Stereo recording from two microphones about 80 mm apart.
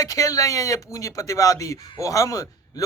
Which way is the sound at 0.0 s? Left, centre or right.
Left.